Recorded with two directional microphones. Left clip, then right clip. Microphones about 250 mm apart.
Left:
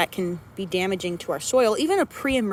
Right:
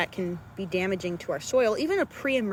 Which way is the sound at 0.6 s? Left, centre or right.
Left.